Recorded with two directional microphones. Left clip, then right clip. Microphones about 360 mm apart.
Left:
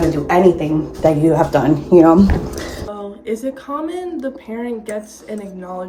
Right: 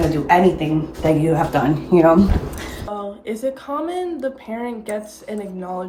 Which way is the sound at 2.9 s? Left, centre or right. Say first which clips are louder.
Left 1 dB; centre.